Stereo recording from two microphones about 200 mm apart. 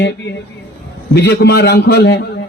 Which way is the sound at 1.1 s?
55° left (ahead or behind).